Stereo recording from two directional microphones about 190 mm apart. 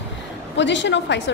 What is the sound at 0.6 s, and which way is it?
Speech, 70° left (ahead or behind).